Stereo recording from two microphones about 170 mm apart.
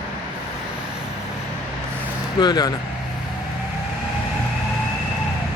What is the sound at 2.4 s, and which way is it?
Speech, 25° left (ahead or behind).